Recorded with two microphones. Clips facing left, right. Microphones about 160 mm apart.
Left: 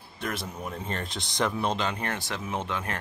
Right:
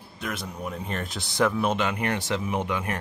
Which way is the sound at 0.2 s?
Centre (ahead or behind).